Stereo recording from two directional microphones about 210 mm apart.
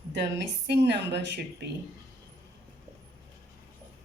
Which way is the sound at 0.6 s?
55° right (ahead or behind).